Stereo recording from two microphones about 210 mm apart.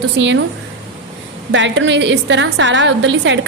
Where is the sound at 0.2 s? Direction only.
60° right (ahead or behind).